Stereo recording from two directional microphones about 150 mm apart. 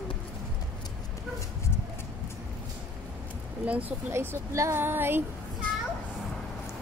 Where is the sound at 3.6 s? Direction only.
10° right (ahead or behind).